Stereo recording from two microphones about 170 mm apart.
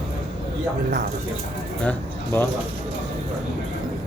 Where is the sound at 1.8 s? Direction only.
10° left (ahead or behind).